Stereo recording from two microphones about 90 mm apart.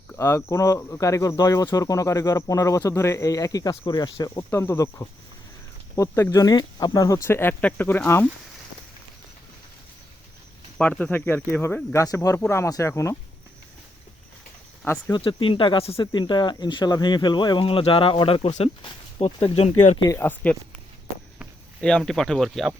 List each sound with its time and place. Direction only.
0.2 s speech: 30° left (ahead or behind); by 4.4 s 50° left (ahead or behind)
4.5 s speech: 30° left (ahead or behind)
7.3 s speech: 25° left (ahead or behind)
10.8 s speech: 10° left (ahead or behind)
11.9 s speech: 40° left (ahead or behind)
14.8 s speech: 25° left (ahead or behind)
15.2 s speech: 80° left
16.1 s speech: 55° left (ahead or behind)
17.7 s speech: 85° left
19.4 s speech: 90° left
20.1 s speech: 20° left (ahead or behind)
21.8 s speech: 5° left (ahead or behind)